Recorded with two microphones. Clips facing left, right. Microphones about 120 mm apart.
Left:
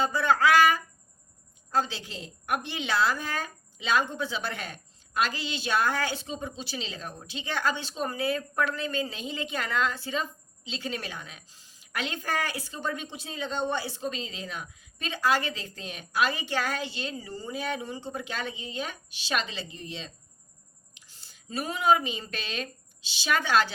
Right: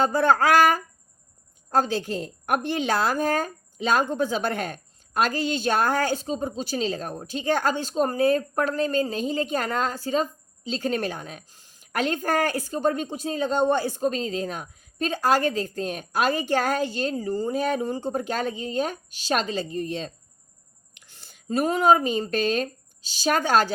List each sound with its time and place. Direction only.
0.0 s a woman's voice: 45° right (ahead or behind)
20.9 s speech: 60° right (ahead or behind); by 23.7 s 45° right (ahead or behind)